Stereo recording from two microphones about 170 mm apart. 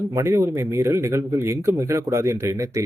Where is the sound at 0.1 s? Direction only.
15° right (ahead or behind).